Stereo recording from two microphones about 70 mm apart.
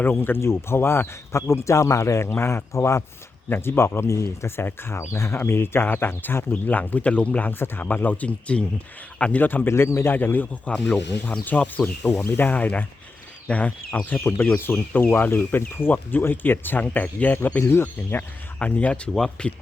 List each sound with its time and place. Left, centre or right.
0.0 s speech: left
7.6 s a man's voice: left; by 9.4 s centre
9.4 s speech: left
18.2 s speech: centre